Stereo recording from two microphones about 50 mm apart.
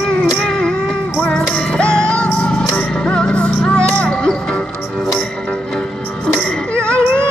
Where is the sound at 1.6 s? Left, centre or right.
Left.